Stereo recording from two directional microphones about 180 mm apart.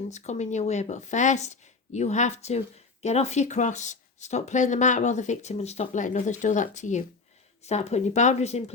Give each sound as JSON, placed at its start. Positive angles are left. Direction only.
{"t": 0.1, "sound": "speech", "side_deg": 40}